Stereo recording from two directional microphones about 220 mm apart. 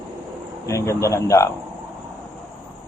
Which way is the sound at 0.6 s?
15° left (ahead or behind).